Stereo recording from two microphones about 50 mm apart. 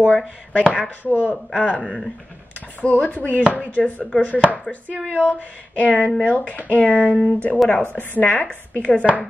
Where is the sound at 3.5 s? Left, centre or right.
Left.